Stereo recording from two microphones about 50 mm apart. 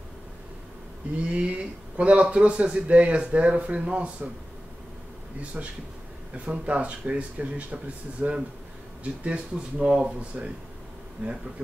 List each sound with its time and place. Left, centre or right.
1.1 s speech: right
5.4 s speech: right